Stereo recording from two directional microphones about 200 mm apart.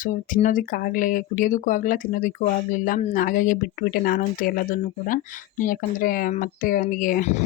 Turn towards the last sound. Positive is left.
turn(degrees=40)  # may be behind; listen again after turning